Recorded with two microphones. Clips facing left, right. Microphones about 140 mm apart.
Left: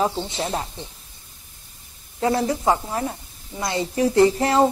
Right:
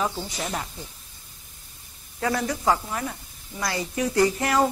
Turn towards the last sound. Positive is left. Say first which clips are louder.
# left 5 dB
turn(degrees=30)  # may be behind; listen again after turning